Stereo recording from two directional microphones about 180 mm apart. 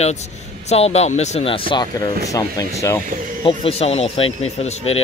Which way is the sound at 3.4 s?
30° left (ahead or behind).